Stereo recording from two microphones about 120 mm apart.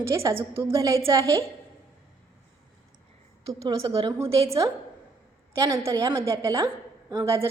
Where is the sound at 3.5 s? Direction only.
30° right (ahead or behind).